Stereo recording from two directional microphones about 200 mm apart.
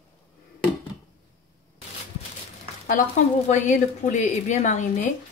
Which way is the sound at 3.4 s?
35° left (ahead or behind).